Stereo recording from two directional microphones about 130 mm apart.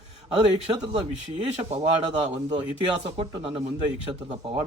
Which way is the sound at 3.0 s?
40° right (ahead or behind).